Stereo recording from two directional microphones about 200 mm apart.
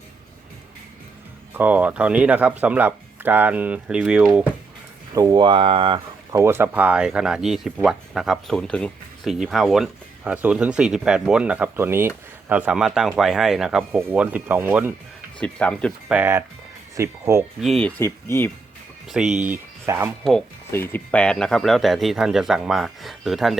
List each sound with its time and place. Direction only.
1.5 s speech: 10° right (ahead or behind)
5.1 s speech: 20° right (ahead or behind)
6.4 s speech: 10° right (ahead or behind)
15.4 s speech: 5° left (ahead or behind)
16.1 s speech: 10° right (ahead or behind)
17.6 s speech: centre (ahead or behind)
19.1 s speech: 5° right (ahead or behind)
20.7 s speech: 10° left (ahead or behind)